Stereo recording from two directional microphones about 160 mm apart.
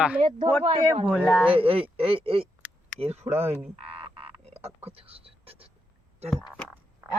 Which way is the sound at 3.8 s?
35° right (ahead or behind).